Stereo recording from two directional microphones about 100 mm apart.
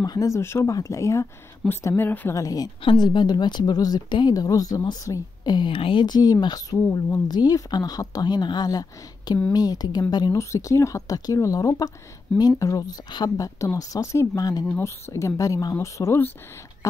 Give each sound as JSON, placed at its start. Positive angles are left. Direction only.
{"t": 0.0, "sound": "speech", "side_deg": 40}
{"t": 2.3, "sound": "speech", "side_deg": 35}
{"t": 2.8, "sound": "speech", "side_deg": 50}
{"t": 10.5, "sound": "speech", "side_deg": 30}